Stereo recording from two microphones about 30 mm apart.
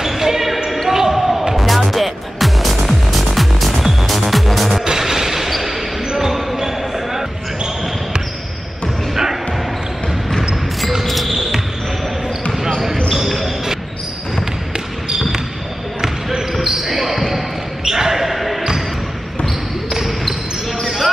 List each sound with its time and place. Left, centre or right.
0.0 s basketball bounce: centre
1.5 s music: centre
4.8 s a sound: centre
6.1 s basketball bounce: centre
9.1 s basketball bounce: centre
11.1 s basketball bounce: centre
13.1 s basketball bounce: centre
16.0 s basketball bounce: centre
17.8 s basketball bounce: centre
18.2 s basketball bounce: centre
19.9 s basketball bounce: centre